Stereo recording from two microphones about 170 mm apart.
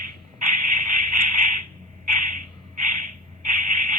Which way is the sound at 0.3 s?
50° right (ahead or behind).